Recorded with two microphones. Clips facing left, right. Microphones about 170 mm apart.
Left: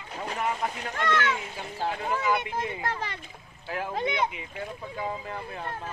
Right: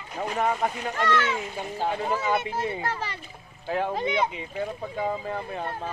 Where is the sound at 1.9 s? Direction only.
25° right (ahead or behind).